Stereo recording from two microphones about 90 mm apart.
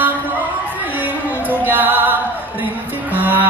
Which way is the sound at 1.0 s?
20° right (ahead or behind).